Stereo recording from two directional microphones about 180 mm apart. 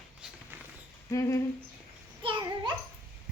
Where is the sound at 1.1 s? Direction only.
15° left (ahead or behind).